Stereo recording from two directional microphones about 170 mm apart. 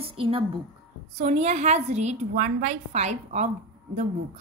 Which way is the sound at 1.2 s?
40° right (ahead or behind).